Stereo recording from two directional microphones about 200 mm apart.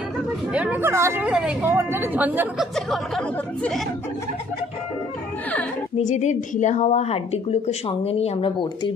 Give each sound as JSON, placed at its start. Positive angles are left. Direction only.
{"t": 0.5, "sound": "speech", "side_deg": -5}
{"t": 2.7, "sound": "speech", "side_deg": 0}
{"t": 5.9, "sound": "a woman's voice", "side_deg": 35}